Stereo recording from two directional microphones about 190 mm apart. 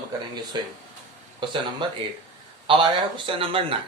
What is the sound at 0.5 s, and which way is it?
Speech, 25° right (ahead or behind).